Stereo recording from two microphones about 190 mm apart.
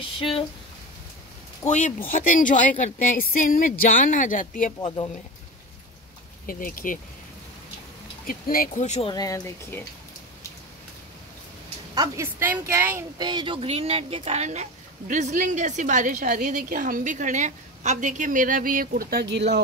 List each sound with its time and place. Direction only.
1.7 s a woman's voice: 40° left (ahead or behind)
4.8 s speech: 25° left (ahead or behind)
6.4 s a woman's voice: 45° left (ahead or behind)
8.3 s speech: 50° left (ahead or behind)
9.1 s speech: 20° left (ahead or behind)
11.9 s a woman's voice: 20° right (ahead or behind); by 19.6 s 65° right (ahead or behind)